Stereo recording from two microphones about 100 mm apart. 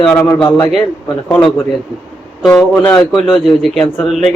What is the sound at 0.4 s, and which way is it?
Speech, 45° left (ahead or behind).